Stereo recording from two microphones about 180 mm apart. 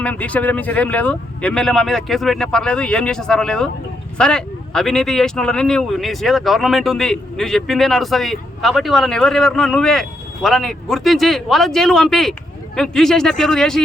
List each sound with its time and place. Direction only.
0.0 s speech: 5° left (ahead or behind)